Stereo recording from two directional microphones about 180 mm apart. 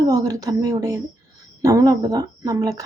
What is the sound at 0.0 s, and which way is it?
Speech, 20° right (ahead or behind).